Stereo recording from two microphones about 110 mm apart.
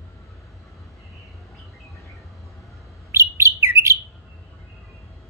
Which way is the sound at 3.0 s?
25° right (ahead or behind).